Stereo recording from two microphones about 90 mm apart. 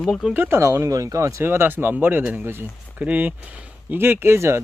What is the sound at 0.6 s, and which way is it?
Speech, 40° right (ahead or behind).